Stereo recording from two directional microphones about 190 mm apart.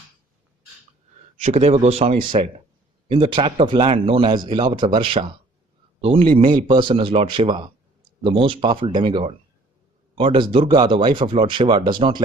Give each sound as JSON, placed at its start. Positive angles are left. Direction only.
{"t": 1.5, "sound": "speech", "side_deg": -35}